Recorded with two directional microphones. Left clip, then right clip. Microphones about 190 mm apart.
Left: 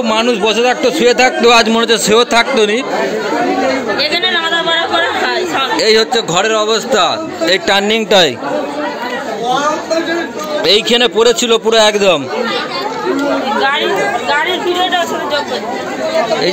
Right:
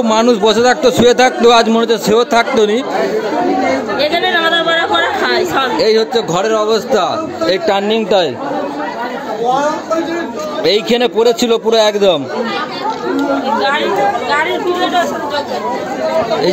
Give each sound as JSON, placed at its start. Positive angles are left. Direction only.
{"t": 0.0, "sound": "a man's voice", "side_deg": -25}
{"t": 4.0, "sound": "chatter", "side_deg": -45}
{"t": 5.8, "sound": "a man's voice", "side_deg": 0}
{"t": 7.7, "sound": "speech", "side_deg": 10}
{"t": 10.6, "sound": "a man's voice", "side_deg": -5}